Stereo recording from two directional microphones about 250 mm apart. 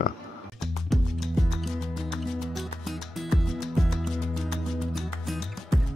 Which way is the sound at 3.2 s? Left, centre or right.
Centre.